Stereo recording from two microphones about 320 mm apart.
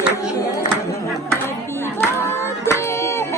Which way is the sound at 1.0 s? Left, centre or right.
Centre.